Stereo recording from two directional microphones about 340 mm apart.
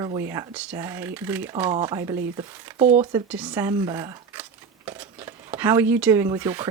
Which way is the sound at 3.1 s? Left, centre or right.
Centre.